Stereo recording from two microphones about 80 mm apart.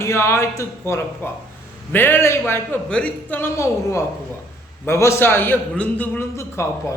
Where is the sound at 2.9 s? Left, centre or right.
Centre.